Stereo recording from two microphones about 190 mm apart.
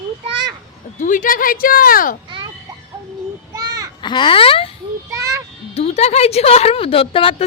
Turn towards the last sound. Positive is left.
turn(degrees=30)  # may be behind; listen again after turning